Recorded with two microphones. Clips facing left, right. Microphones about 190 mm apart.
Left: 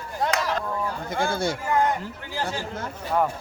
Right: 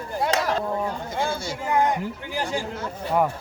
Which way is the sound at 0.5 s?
30° right (ahead or behind).